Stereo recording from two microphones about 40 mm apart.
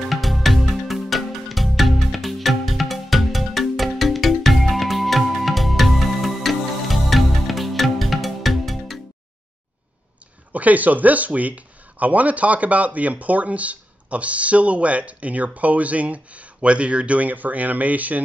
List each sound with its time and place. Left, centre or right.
0.0 s music: centre
10.5 s speech: right